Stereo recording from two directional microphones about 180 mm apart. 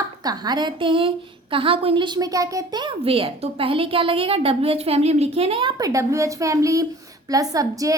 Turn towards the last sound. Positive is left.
turn(degrees=-20)  # may be behind; listen again after turning